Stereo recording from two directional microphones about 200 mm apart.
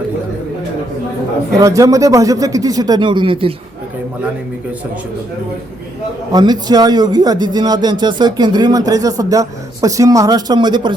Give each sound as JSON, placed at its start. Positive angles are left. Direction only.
{"t": 1.5, "sound": "speech", "side_deg": -15}
{"t": 6.3, "sound": "speech", "side_deg": -20}